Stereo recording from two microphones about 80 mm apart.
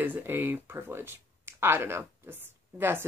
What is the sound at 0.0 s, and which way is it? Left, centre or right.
Speech, right.